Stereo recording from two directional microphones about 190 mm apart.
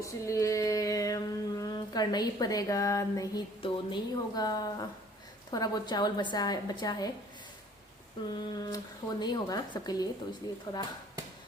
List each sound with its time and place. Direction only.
0.0 s a sound: 15° left (ahead or behind)
3.6 s speech: 25° left (ahead or behind)
8.3 s speech: 20° left (ahead or behind)